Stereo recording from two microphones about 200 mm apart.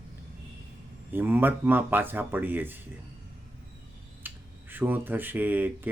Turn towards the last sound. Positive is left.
turn(degrees=-10)  # may be behind; listen again after turning